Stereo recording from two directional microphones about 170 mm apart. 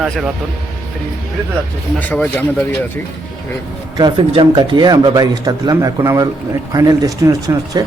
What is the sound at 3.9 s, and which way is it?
Speech, 25° right (ahead or behind).